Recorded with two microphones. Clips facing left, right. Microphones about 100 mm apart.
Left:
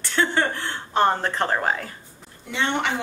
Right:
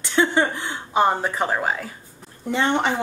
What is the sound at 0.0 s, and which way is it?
Speech, 15° right (ahead or behind).